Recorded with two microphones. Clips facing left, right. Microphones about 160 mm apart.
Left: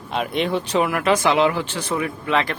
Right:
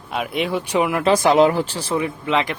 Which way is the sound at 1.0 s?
35° right (ahead or behind).